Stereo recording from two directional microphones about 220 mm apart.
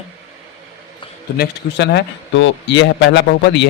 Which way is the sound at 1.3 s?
50° left (ahead or behind).